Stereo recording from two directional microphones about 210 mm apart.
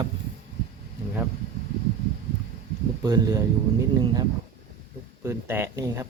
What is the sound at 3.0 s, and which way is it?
Speech, 20° right (ahead or behind).